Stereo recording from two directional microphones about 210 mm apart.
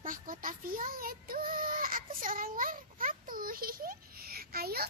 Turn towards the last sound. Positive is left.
turn(degrees=-45)  # may be behind; listen again after turning